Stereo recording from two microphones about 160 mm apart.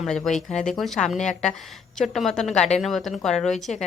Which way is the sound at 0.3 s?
Centre (ahead or behind).